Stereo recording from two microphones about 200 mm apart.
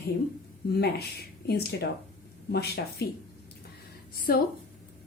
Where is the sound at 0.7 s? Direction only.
55° left (ahead or behind).